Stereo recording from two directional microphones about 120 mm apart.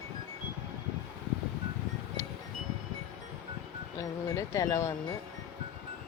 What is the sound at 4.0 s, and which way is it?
Speech, 25° left (ahead or behind).